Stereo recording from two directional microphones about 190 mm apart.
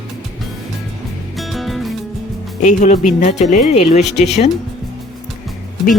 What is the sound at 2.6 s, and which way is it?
Speech, 40° left (ahead or behind).